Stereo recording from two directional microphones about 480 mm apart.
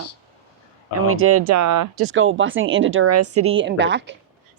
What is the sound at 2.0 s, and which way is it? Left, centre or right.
A woman's voice, right.